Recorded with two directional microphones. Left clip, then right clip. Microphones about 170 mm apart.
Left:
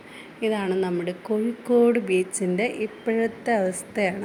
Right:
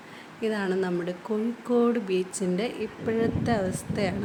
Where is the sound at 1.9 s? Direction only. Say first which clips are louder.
Left 5 dB; 45° right (ahead or behind).